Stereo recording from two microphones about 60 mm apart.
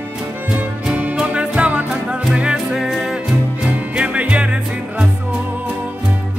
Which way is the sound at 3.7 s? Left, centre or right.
Right.